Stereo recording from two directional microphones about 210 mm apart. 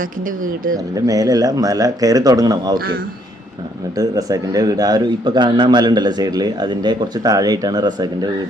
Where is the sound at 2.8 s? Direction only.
45° right (ahead or behind).